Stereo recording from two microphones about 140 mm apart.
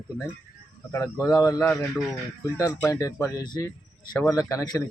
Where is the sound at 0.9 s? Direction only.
20° left (ahead or behind).